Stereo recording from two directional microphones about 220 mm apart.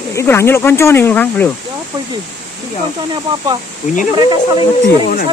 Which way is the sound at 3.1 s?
20° right (ahead or behind).